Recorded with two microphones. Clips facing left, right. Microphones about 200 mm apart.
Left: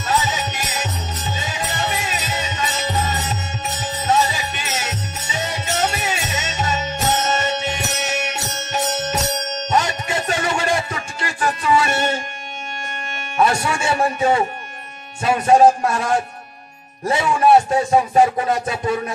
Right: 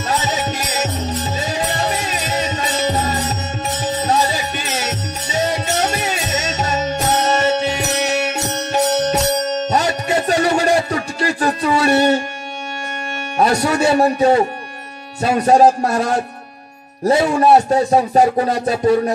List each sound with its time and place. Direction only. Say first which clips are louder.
0.0 s music: right 2 dB; 40° right (ahead or behind)
13.4 s a sound: right 4 dB; 40° right (ahead or behind)
15.2 s speech: right 1 dB; 40° right (ahead or behind)